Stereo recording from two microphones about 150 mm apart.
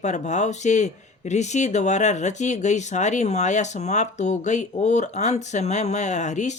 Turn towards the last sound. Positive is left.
turn(degrees=50)  # may be behind; listen again after turning